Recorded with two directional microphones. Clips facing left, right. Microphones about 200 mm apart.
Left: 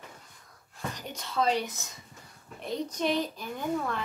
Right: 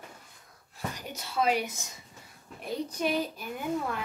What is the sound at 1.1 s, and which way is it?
A woman's voice, 10° right (ahead or behind).